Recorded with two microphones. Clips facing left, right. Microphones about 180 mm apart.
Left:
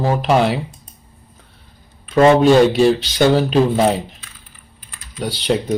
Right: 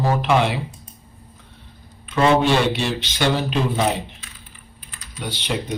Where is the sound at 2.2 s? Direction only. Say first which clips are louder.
Left 7 dB; 40° left (ahead or behind).